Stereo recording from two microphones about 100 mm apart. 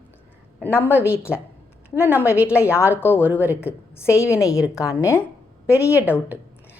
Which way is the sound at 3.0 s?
20° left (ahead or behind).